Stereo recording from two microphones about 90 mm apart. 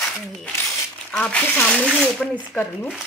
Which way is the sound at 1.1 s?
10° left (ahead or behind).